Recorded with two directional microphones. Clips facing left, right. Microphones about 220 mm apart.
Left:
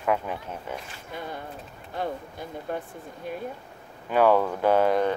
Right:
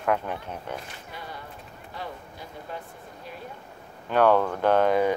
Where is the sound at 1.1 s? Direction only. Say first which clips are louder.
Left 6 dB; 50° left (ahead or behind).